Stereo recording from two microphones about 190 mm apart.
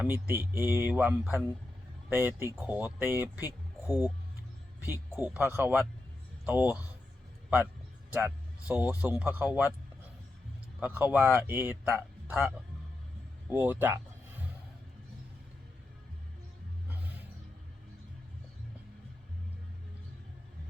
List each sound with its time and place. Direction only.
0.0 s speech: 10° right (ahead or behind)
3.8 s speech: 15° left (ahead or behind)
5.1 s speech: 5° right (ahead or behind)
8.1 s speech: 10° right (ahead or behind)
10.8 s speech: 10° right (ahead or behind)
13.5 s a sound: 10° right (ahead or behind)